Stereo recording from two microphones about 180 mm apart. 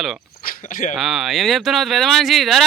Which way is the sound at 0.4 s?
50° left (ahead or behind).